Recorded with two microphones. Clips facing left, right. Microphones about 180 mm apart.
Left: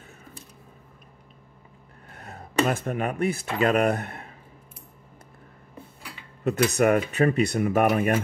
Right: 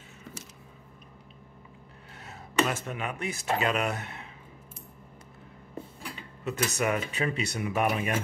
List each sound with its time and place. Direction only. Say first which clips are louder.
2.1 s a sound: left 4 dB; 55° left (ahead or behind)
2.7 s speech: left 7 dB; 50° left (ahead or behind)
6.4 s speech: left 8 dB; 55° left (ahead or behind)